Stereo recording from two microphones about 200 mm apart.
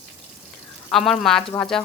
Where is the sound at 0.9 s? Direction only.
Centre (ahead or behind).